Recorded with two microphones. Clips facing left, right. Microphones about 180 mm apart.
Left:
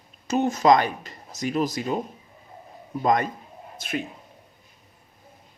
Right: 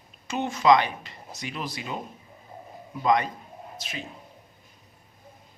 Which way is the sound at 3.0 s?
45° left (ahead or behind).